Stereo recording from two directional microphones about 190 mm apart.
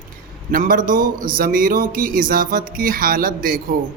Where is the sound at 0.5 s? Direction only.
45° right (ahead or behind).